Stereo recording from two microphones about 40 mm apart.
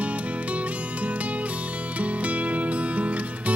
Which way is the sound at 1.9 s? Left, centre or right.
Right.